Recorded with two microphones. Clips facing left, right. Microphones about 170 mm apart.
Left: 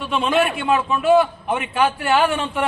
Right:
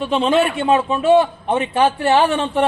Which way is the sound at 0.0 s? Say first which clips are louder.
Right 3 dB; 30° right (ahead or behind).